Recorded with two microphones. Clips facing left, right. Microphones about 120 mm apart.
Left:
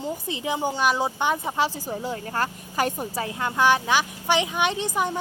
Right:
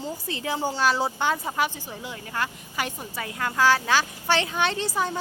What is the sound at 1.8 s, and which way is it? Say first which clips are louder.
A woman's voice: left 7 dB; 35° left (ahead or behind).